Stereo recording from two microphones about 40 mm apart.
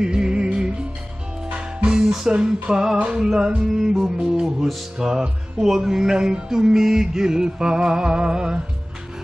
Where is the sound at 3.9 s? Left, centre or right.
Centre.